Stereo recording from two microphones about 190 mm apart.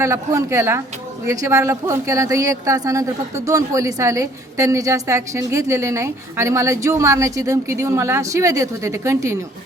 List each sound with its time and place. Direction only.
0.0 s speech: 15° right (ahead or behind)